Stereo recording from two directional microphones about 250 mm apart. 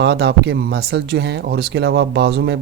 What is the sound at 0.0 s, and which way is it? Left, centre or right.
Speech, right.